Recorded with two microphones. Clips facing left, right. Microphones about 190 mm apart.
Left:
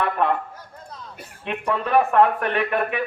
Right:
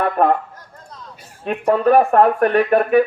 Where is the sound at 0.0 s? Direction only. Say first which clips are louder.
Right 6 dB; 45° right (ahead or behind).